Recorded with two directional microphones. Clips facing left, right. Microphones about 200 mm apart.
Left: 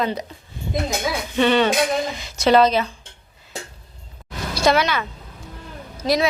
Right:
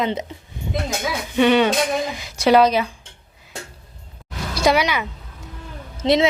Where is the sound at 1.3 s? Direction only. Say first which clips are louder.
Right 2 dB; 10° right (ahead or behind).